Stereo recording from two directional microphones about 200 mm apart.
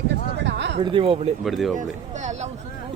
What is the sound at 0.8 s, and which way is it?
Speech, 25° right (ahead or behind).